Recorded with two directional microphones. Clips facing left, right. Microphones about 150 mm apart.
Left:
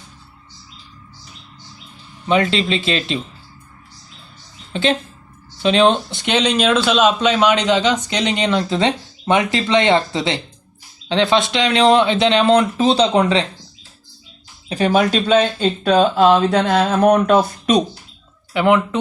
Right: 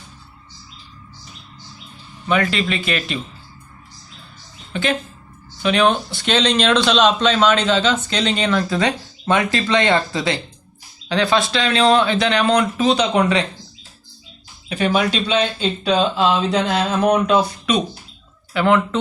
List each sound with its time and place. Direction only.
2.2 s speech: 25° left (ahead or behind)
4.7 s a woman's voice: 25° left (ahead or behind)
14.7 s speech: 35° left (ahead or behind)
18.5 s speech: 15° left (ahead or behind)